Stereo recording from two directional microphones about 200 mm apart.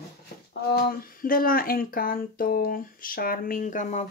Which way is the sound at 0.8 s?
45° left (ahead or behind).